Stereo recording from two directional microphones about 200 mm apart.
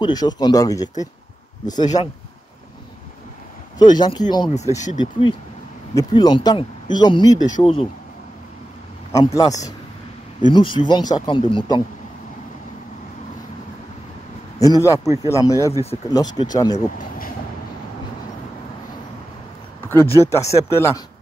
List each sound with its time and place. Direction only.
0.0 s speech: 20° left (ahead or behind)
3.7 s speech: 20° left (ahead or behind)
9.1 s speech: 20° left (ahead or behind)
14.6 s speech: 15° left (ahead or behind)
19.8 s a sound: 10° left (ahead or behind)
20.2 s speech: 15° left (ahead or behind)